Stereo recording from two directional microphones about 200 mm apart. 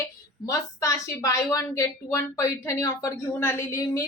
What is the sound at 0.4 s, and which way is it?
Speech, 15° left (ahead or behind).